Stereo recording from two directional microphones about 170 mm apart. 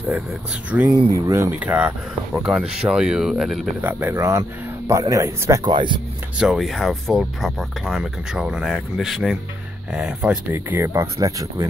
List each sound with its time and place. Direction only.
0.7 s speech: 10° right (ahead or behind)
6.3 s speech: 5° right (ahead or behind); by 11.6 s 20° right (ahead or behind)